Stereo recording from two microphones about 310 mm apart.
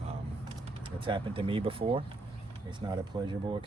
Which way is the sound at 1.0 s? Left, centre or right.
Centre.